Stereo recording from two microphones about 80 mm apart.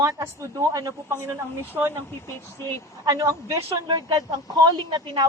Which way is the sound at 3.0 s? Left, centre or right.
Right.